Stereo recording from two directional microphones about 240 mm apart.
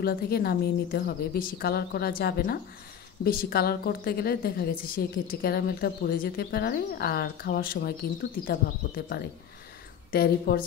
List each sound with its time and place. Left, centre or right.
0.0 s a woman's voice: left